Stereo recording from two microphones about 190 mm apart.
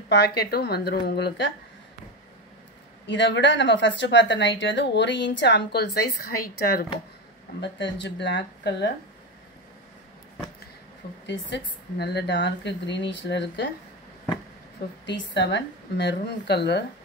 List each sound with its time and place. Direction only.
0.1 s a woman's voice: 60° left (ahead or behind)
3.1 s a woman's voice: 70° left (ahead or behind)
7.6 s a woman's voice: 65° left (ahead or behind)
11.2 s a woman's voice: 65° left (ahead or behind)
15.0 s a woman's voice: 65° left (ahead or behind)